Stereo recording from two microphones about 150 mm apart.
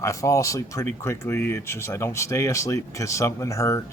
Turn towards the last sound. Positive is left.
turn(degrees=20)  # may be behind; listen again after turning